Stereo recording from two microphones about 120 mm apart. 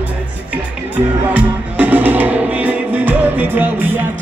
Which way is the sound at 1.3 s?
15° right (ahead or behind).